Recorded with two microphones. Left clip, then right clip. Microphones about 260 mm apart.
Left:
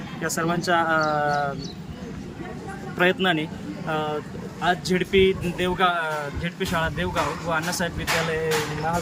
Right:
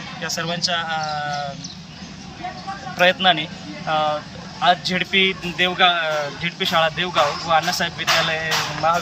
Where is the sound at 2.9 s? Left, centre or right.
Centre.